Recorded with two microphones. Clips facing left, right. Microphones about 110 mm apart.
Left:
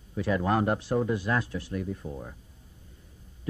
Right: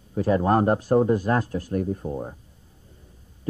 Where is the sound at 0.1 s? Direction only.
40° right (ahead or behind).